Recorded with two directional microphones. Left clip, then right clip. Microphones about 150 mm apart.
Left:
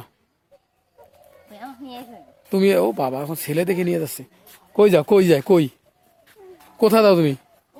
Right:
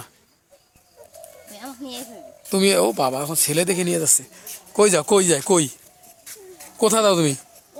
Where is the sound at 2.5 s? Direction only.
30° left (ahead or behind).